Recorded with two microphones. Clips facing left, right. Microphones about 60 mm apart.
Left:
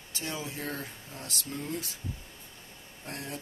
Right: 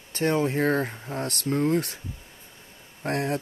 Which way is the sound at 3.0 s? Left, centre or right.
Right.